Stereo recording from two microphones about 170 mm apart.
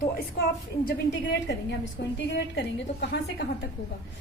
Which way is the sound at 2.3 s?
80° left.